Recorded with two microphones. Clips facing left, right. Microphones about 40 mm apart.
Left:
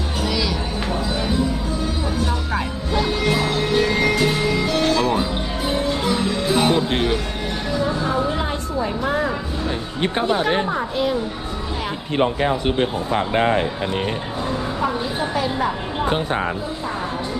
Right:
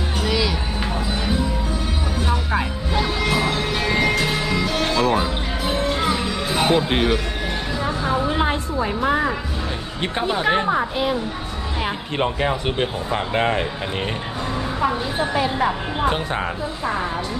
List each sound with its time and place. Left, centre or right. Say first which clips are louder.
0.2 s music: right 1 dB; centre
2.2 s music: right 1 dB; centre
7.8 s a sound: left 1 dB; right
9.0 s a woman's voice: right 4 dB; centre
14.8 s a woman's voice: right 3 dB; centre